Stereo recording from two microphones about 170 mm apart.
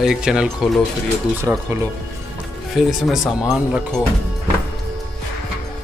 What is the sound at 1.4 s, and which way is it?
Speech, 15° right (ahead or behind).